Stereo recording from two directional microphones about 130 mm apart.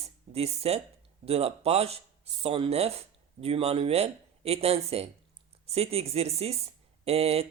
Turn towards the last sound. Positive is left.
turn(degrees=-50)  # may be behind; listen again after turning